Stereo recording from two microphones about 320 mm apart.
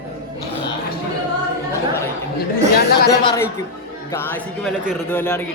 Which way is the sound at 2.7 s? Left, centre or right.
Left.